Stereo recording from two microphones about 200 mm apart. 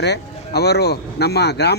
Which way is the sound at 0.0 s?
55° left (ahead or behind).